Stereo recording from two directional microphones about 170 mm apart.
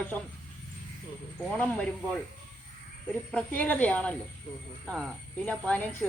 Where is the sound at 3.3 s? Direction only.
10° left (ahead or behind).